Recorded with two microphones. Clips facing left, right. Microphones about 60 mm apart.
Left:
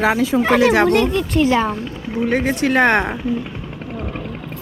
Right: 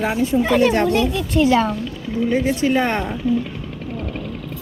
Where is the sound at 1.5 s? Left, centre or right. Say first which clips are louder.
Even; left.